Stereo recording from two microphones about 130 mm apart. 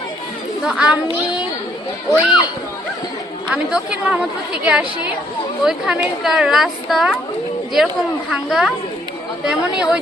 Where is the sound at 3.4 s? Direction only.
5° right (ahead or behind).